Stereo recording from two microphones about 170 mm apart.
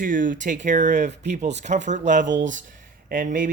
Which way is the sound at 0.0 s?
50° right (ahead or behind).